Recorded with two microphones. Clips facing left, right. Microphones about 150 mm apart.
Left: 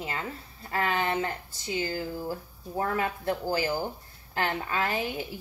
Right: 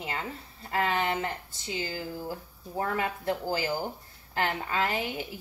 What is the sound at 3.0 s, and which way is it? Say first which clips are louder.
Speech: left 1 dB; 20° right (ahead or behind).